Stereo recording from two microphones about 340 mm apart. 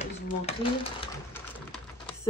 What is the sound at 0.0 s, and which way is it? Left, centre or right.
Typewriter, centre.